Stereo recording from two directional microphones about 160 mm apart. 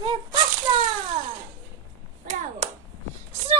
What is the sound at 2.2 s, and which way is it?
Speech, 45° right (ahead or behind).